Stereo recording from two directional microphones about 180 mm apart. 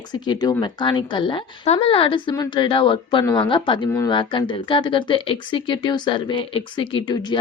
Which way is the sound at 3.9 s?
15° left (ahead or behind).